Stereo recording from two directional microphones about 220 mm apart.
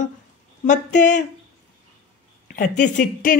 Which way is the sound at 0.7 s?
35° left (ahead or behind).